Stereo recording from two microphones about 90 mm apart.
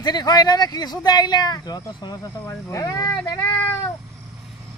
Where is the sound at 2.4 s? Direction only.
35° left (ahead or behind).